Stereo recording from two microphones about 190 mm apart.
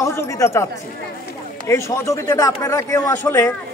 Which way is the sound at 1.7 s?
15° left (ahead or behind).